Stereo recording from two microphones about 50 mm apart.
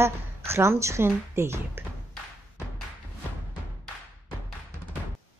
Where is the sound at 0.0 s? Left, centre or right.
Right.